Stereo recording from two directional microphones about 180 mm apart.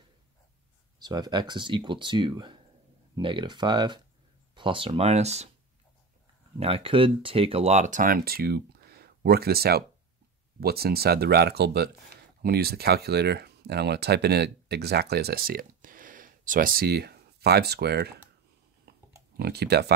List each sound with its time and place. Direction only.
0.9 s speech: 25° right (ahead or behind)
6.6 s speech: 30° right (ahead or behind); by 18.1 s 65° right (ahead or behind)
18.9 s pig: 60° right (ahead or behind)
19.3 s speech: 65° right (ahead or behind)